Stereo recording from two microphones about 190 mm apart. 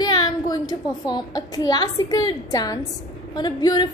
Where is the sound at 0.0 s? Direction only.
20° left (ahead or behind).